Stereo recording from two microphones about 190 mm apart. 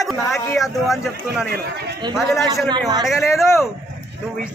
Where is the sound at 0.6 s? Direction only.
Centre (ahead or behind).